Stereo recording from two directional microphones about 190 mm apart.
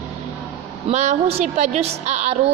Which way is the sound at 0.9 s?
35° right (ahead or behind).